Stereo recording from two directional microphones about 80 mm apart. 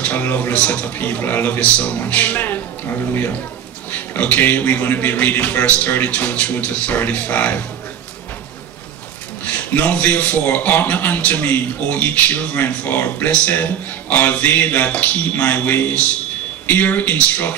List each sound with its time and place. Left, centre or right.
0.0 s a man's voice: left
9.8 s a man's voice: left